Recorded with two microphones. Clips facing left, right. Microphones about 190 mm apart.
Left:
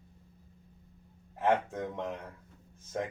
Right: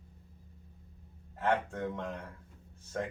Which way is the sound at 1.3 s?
20° left (ahead or behind).